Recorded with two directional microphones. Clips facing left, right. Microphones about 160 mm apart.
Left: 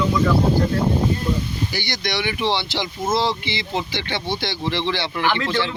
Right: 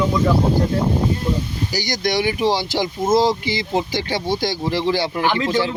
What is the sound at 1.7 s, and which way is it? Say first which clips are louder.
Speech: right 9 dB; 40° right (ahead or behind).